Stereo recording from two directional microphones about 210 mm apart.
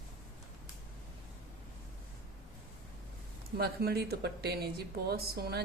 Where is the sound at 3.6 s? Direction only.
50° right (ahead or behind).